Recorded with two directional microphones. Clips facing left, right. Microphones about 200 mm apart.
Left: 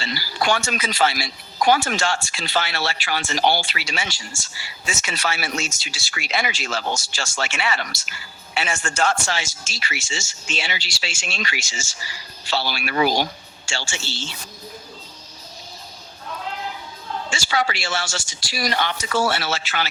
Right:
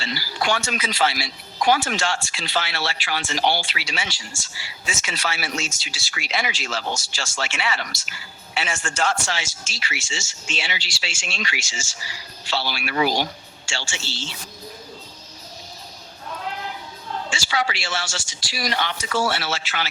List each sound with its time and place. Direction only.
0.0 s speech: 45° left (ahead or behind)
17.3 s speech: 45° left (ahead or behind)